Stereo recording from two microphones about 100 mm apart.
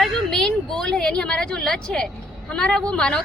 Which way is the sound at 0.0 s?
5° left (ahead or behind).